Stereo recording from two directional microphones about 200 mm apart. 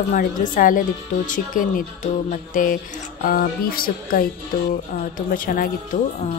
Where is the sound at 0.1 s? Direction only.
45° left (ahead or behind).